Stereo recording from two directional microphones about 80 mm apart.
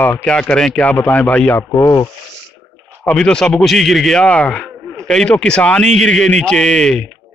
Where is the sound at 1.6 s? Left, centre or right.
Left.